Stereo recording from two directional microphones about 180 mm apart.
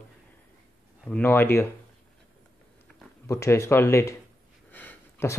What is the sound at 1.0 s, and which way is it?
Speech, 10° left (ahead or behind).